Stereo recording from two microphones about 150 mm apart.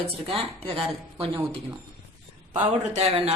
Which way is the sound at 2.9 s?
40° right (ahead or behind).